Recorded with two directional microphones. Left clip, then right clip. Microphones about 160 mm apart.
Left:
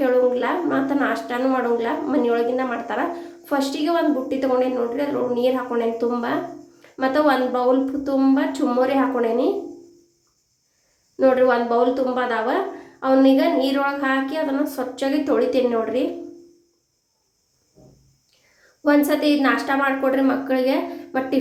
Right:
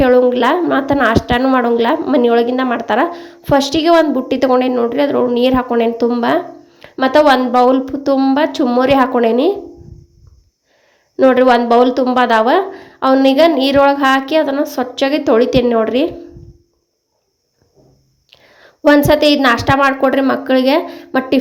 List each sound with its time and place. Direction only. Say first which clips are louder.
0.0 s a woman's voice: right 8 dB; 60° right (ahead or behind)
11.2 s a woman's voice: right 7 dB; 60° right (ahead or behind)
18.8 s a woman's voice: right 9 dB; 60° right (ahead or behind)